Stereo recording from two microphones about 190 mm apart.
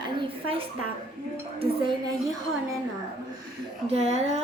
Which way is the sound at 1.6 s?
25° right (ahead or behind).